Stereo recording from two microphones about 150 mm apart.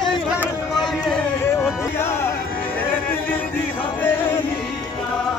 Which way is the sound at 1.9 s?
15° left (ahead or behind).